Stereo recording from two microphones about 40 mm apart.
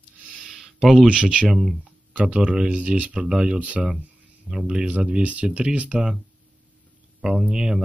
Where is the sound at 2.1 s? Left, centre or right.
Right.